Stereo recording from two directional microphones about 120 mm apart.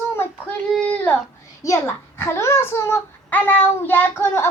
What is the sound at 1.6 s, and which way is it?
A child's voice, 25° left (ahead or behind).